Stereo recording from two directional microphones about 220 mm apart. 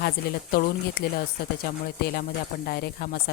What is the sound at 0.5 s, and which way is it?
Speech, 45° left (ahead or behind).